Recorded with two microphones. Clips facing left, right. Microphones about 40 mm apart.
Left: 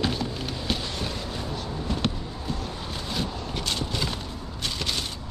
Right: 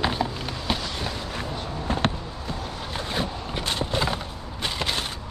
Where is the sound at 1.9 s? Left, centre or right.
Right.